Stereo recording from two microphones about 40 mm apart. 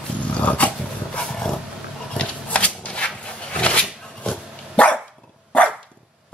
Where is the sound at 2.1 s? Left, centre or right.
Left.